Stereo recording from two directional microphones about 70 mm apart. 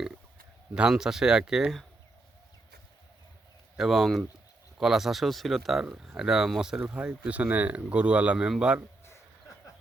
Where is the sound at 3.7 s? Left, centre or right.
Centre.